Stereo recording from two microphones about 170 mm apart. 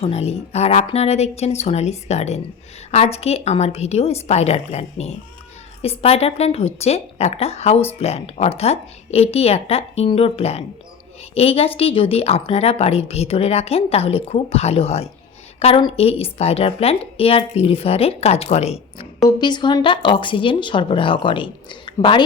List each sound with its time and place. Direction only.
0.0 s a woman's voice: 35° left (ahead or behind)
19.4 s speech: 25° left (ahead or behind)